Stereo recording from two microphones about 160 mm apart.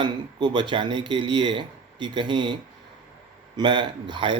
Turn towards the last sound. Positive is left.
turn(degrees=-30)  # may be behind; listen again after turning